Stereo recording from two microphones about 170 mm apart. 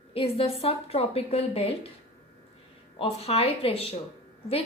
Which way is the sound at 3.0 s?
35° left (ahead or behind).